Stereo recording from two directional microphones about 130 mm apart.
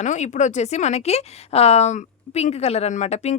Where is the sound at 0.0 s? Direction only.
65° left (ahead or behind).